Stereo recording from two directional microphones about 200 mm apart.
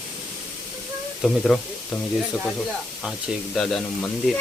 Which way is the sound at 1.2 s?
Centre (ahead or behind).